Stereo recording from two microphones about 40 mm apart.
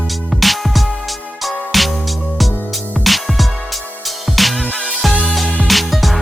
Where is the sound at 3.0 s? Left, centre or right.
Centre.